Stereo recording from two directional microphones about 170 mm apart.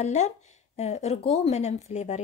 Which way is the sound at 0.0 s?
40° left (ahead or behind).